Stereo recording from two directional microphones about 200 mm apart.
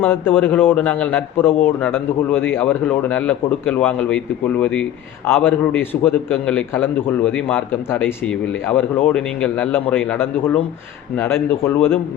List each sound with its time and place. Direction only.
0.0 s a man's voice: 10° left (ahead or behind)